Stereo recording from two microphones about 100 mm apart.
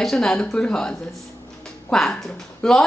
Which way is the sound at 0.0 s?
5° left (ahead or behind).